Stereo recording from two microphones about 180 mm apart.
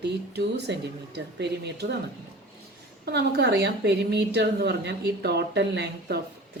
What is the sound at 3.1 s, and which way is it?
A woman's voice, 65° right (ahead or behind).